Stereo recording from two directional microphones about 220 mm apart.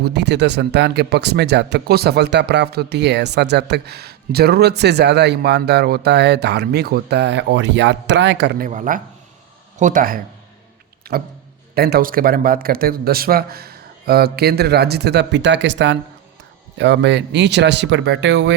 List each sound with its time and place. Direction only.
0.0 s speech: 50° right (ahead or behind)
11.1 s a sound: 45° right (ahead or behind)
11.7 s speech: 45° right (ahead or behind)